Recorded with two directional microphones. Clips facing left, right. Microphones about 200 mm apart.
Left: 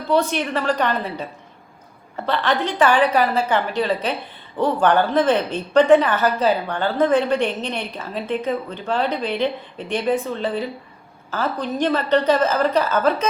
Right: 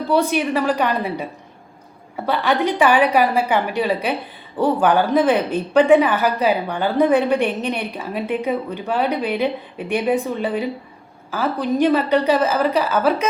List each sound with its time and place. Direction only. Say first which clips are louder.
0.1 s a woman's voice: right 1 dB; 10° right (ahead or behind)